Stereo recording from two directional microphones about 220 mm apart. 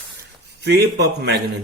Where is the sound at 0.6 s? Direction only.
45° right (ahead or behind).